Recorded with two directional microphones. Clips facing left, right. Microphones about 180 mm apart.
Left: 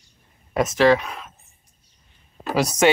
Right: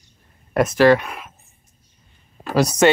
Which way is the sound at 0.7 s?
5° right (ahead or behind).